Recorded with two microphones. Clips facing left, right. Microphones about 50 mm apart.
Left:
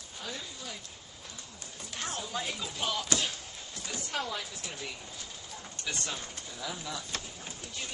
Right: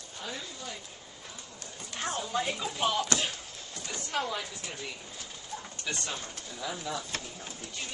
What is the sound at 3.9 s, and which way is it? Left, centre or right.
A woman's voice, centre.